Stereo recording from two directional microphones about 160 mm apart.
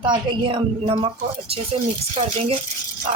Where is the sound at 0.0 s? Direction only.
30° right (ahead or behind).